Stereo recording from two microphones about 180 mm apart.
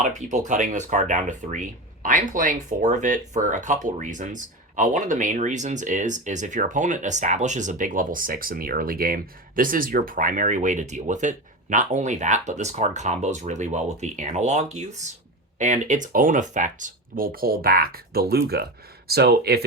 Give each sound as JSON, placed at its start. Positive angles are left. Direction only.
{"t": 0.0, "sound": "speech", "side_deg": -40}